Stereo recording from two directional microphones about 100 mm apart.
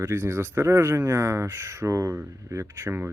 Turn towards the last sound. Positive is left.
turn(degrees=-25)  # may be behind; listen again after turning